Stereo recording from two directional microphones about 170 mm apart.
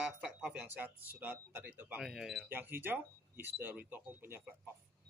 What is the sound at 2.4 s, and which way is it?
Speech, 10° right (ahead or behind).